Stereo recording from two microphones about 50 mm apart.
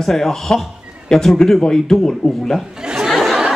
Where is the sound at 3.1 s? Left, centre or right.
Centre.